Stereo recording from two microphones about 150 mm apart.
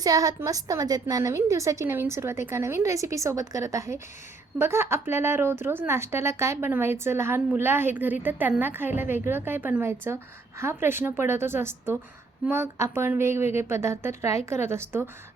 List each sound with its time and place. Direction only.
0.0 s a woman's voice: 25° right (ahead or behind)